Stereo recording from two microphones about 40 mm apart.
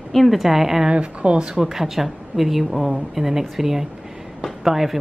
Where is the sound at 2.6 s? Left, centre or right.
Centre.